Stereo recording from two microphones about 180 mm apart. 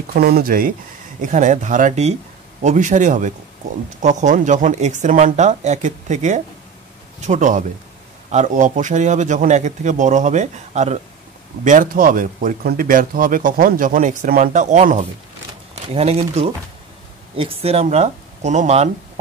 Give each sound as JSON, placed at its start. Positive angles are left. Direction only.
{"t": 0.1, "sound": "speech", "side_deg": -60}